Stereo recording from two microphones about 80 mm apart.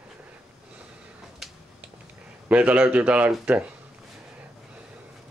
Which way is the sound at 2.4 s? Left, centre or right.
Centre.